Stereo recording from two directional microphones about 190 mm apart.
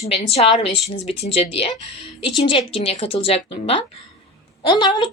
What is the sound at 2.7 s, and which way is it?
Speech, 30° left (ahead or behind).